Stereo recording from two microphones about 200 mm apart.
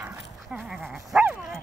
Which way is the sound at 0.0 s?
5° right (ahead or behind).